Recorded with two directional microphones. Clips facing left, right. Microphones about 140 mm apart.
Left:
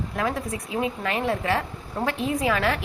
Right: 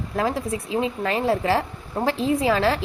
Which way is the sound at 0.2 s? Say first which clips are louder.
Right 4 dB; 30° right (ahead or behind).